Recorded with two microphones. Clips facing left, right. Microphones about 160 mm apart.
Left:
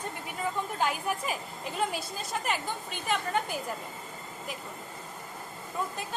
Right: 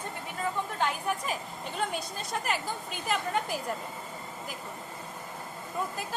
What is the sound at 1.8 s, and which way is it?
A woman's voice, centre (ahead or behind).